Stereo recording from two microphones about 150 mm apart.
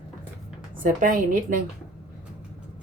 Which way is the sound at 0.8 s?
65° right (ahead or behind).